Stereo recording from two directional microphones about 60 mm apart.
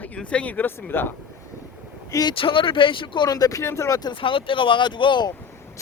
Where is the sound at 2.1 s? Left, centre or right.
Left.